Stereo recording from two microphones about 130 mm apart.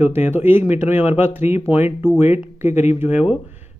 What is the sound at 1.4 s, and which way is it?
Speech, 55° left (ahead or behind).